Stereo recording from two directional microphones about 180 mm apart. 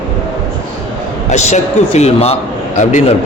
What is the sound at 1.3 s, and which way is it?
Speech, 40° left (ahead or behind).